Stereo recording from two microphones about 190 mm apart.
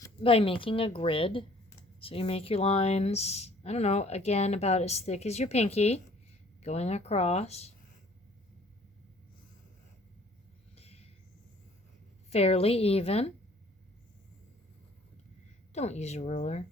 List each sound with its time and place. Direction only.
0.2 s a woman's voice: 30° left (ahead or behind)
10.8 s a sound: 30° left (ahead or behind)
12.3 s speech: 30° left (ahead or behind)
15.7 s speech: 35° left (ahead or behind)